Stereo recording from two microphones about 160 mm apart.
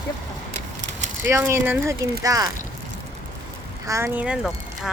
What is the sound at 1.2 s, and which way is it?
Speech, 15° right (ahead or behind).